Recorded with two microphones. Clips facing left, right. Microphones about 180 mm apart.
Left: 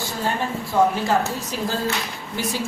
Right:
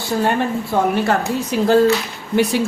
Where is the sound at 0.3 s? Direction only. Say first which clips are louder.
Right 6 dB; 60° right (ahead or behind).